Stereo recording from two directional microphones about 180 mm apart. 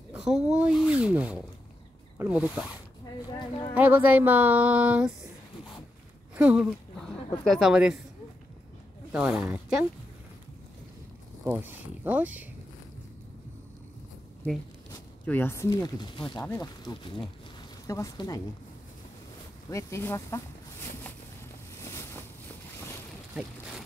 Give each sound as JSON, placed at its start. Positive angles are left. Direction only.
{"t": 0.1, "sound": "speech", "side_deg": -5}
{"t": 6.3, "sound": "speech", "side_deg": -5}
{"t": 9.1, "sound": "speech", "side_deg": -5}
{"t": 11.4, "sound": "speech", "side_deg": -10}
{"t": 15.2, "sound": "speech", "side_deg": 10}
{"t": 19.7, "sound": "speech", "side_deg": 15}
{"t": 21.8, "sound": "boat", "side_deg": 15}